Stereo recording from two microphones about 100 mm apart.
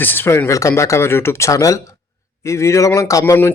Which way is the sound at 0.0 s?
20° left (ahead or behind).